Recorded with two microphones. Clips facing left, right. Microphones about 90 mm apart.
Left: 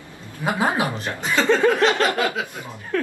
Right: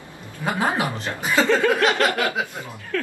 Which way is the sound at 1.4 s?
25° left (ahead or behind).